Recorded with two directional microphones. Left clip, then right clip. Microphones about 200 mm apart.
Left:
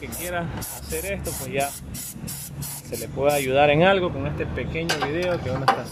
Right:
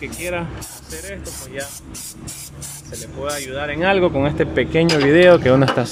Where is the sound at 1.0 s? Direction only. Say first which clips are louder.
Left 2 dB; 5° left (ahead or behind).